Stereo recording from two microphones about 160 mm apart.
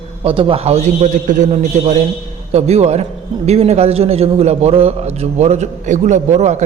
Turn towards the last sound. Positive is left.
turn(degrees=-45)  # may be behind; listen again after turning